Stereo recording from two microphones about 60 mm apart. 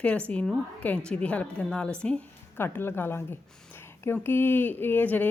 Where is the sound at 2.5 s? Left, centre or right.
Left.